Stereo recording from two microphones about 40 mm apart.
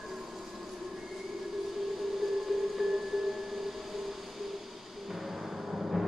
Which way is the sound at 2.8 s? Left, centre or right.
Centre.